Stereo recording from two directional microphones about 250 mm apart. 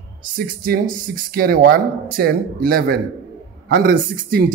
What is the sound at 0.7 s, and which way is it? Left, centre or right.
A man's voice, right.